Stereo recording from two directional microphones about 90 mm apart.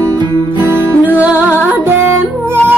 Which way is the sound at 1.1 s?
15° right (ahead or behind).